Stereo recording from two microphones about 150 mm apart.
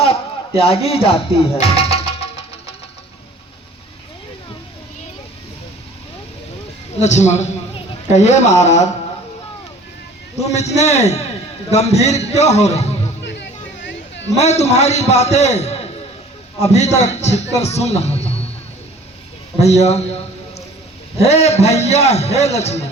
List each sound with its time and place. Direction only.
0.0 s music: 40° left (ahead or behind)
7.0 s a man's voice: 50° left (ahead or behind)
10.5 s a man's voice: 45° left (ahead or behind)
14.3 s a man's voice: 45° left (ahead or behind)
19.5 s a man's voice: 45° left (ahead or behind)
21.2 s a man's voice: 45° left (ahead or behind)